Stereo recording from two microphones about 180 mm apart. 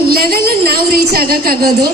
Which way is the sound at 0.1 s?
55° right (ahead or behind).